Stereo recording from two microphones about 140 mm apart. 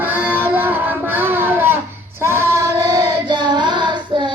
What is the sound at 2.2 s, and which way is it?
Child singing, 15° right (ahead or behind).